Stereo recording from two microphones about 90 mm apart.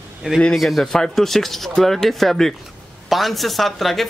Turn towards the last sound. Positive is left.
turn(degrees=0)  # may be behind; listen again after turning